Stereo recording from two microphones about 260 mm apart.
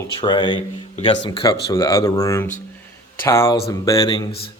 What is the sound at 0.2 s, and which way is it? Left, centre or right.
Speech, centre.